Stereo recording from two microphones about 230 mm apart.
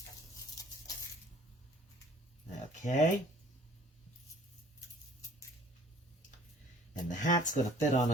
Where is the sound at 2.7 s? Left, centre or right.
Left.